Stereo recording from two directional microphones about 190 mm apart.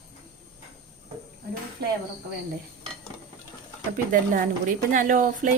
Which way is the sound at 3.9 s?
45° right (ahead or behind).